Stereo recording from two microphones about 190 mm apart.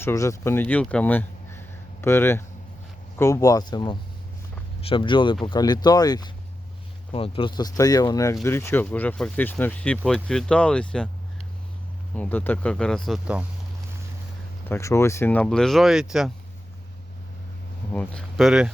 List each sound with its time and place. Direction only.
0.0 s speech: 15° left (ahead or behind)
12.1 s speech: 10° left (ahead or behind)
14.7 s speech: 15° left (ahead or behind); by 16.3 s centre (ahead or behind)
17.9 s speech: 5° left (ahead or behind)